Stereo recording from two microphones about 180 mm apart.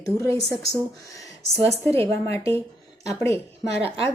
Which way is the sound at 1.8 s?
15° left (ahead or behind).